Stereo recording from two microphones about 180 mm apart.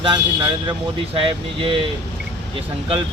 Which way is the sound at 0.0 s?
25° right (ahead or behind).